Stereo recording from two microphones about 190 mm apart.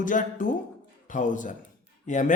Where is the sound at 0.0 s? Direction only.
45° left (ahead or behind).